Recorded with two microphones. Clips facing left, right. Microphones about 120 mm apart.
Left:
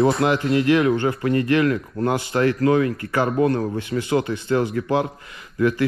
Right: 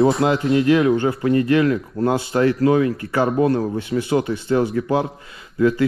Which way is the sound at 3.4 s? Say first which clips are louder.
Right 2 dB; 35° right (ahead or behind).